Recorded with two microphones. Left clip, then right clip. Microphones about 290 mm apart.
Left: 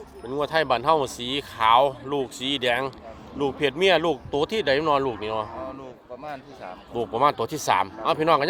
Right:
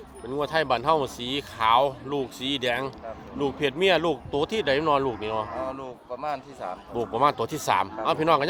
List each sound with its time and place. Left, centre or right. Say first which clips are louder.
0.3 s speech: left 2 dB; centre
5.6 s speech: right 3 dB; right
7.0 s speech: left 1 dB; centre